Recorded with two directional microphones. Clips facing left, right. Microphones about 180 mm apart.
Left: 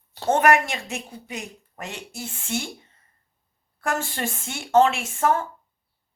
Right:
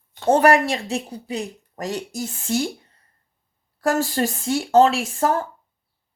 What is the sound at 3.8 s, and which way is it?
Speech, 40° right (ahead or behind).